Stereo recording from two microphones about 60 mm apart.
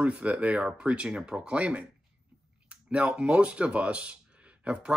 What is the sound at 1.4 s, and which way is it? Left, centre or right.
Speech, right.